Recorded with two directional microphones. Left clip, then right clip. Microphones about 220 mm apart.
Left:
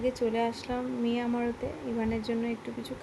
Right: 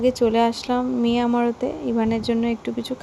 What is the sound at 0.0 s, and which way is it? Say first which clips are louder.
Speech: right 10 dB; 35° right (ahead or behind).